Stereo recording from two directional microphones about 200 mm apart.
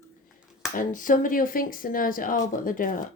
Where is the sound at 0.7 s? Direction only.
40° left (ahead or behind).